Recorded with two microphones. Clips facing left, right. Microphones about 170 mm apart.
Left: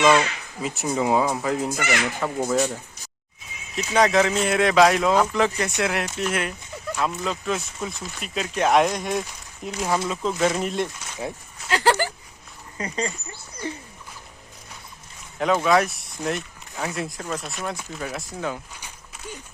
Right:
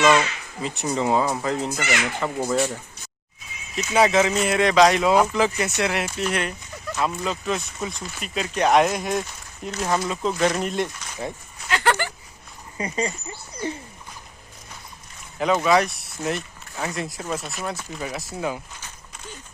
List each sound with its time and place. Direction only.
0.1 s speech: 5° left (ahead or behind)
3.9 s speech: 5° right (ahead or behind)
11.7 s a sound: 35° left (ahead or behind)
12.7 s speech: 15° right (ahead or behind)
15.4 s speech: centre (ahead or behind)